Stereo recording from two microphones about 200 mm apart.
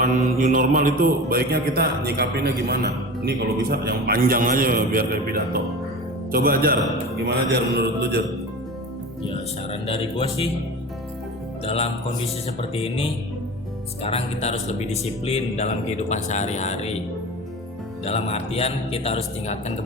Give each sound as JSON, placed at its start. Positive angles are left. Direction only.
{"t": 0.0, "sound": "a man's voice", "side_deg": -40}
{"t": 9.8, "sound": "speech", "side_deg": 25}
{"t": 11.6, "sound": "speech", "side_deg": 30}
{"t": 18.0, "sound": "speech", "side_deg": 30}